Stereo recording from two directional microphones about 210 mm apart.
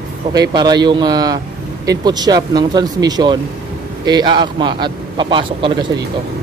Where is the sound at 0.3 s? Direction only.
20° right (ahead or behind).